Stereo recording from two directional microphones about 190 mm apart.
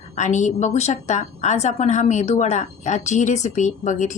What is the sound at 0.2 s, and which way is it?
A woman's voice, 40° left (ahead or behind).